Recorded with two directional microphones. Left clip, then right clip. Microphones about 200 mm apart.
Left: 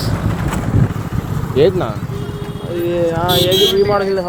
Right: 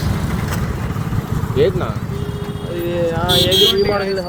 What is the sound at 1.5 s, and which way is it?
Speech, 45° left (ahead or behind).